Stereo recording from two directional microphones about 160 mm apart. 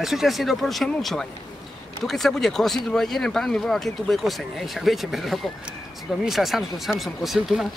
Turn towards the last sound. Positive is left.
turn(degrees=0)  # may be behind; listen again after turning